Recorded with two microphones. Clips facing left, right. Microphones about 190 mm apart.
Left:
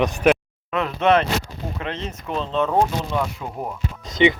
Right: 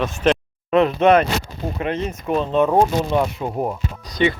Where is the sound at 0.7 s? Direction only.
20° right (ahead or behind).